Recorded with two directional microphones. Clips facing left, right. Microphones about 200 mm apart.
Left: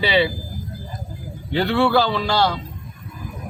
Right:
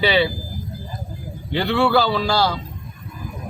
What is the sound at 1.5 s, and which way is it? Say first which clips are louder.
A man's voice: even; centre (ahead or behind).